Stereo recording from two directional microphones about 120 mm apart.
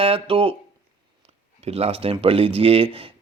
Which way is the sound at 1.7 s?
55° right (ahead or behind).